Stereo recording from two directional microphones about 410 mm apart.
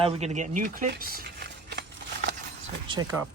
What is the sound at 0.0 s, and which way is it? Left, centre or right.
Speech, centre.